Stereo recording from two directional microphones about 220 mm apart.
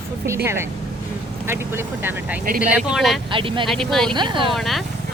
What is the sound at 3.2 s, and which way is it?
Speech, 25° right (ahead or behind).